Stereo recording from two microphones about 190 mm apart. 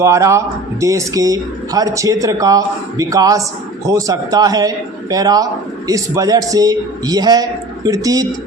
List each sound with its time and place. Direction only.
0.0 s a man's voice: 15° right (ahead or behind)